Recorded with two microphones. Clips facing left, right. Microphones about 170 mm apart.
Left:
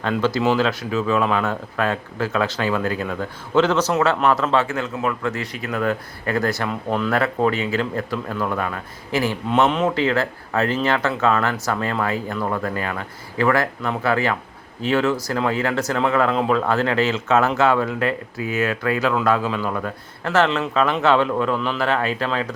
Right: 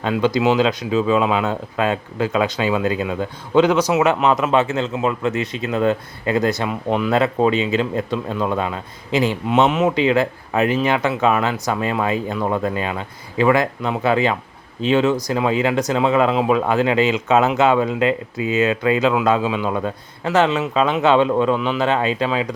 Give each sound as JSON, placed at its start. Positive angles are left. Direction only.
{"t": 0.2, "sound": "a man's voice", "side_deg": -15}
{"t": 9.6, "sound": "speech", "side_deg": -5}
{"t": 9.9, "sound": "a man's voice", "side_deg": -15}